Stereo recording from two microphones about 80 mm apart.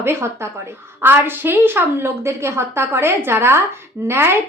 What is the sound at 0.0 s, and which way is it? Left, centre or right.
A woman's voice, right.